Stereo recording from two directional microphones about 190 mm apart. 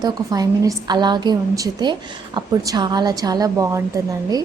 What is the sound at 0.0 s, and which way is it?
A woman's voice, 20° right (ahead or behind).